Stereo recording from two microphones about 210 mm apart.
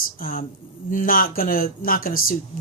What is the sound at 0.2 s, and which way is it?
A woman's voice, 45° left (ahead or behind).